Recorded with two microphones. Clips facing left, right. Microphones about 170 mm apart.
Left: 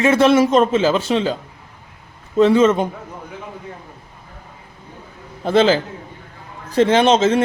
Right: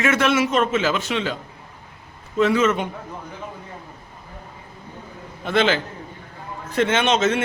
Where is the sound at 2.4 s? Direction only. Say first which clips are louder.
Left 6 dB; 30° left (ahead or behind).